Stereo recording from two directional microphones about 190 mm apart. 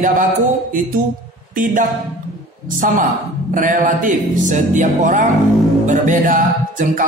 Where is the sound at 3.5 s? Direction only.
45° right (ahead or behind).